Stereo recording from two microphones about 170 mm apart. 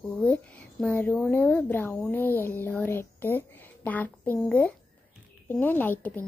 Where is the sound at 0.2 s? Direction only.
10° left (ahead or behind).